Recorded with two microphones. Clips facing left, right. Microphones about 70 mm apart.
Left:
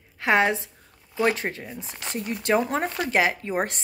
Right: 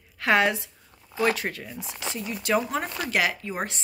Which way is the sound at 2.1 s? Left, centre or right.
Left.